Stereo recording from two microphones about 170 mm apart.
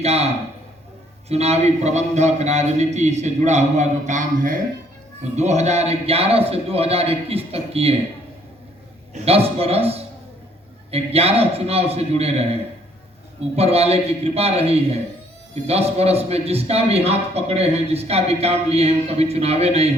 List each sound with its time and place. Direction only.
0.0 s a man's voice: 40° right (ahead or behind)
1.3 s a man's voice: 40° right (ahead or behind)
9.1 s a man's voice: 35° right (ahead or behind)
13.6 s a man's voice: 35° right (ahead or behind)